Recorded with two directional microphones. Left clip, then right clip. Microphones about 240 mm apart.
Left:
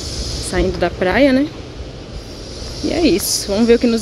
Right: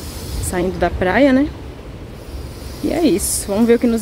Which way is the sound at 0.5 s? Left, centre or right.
Centre.